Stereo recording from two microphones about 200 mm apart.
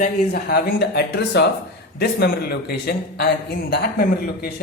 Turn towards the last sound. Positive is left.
turn(degrees=50)  # may be behind; listen again after turning